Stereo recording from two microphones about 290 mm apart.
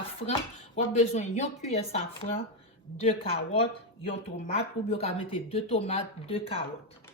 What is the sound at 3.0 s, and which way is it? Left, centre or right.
Speech, centre.